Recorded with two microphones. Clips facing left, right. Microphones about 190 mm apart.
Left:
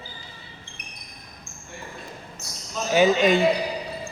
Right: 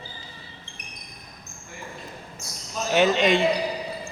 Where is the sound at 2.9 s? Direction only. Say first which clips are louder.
Left 2 dB; 5° left (ahead or behind).